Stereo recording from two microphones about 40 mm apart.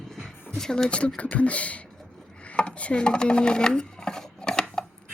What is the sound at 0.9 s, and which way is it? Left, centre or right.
Speech, left.